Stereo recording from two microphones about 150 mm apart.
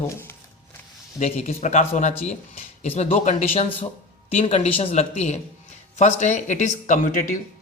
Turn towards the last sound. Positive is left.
turn(degrees=60)  # may be behind; listen again after turning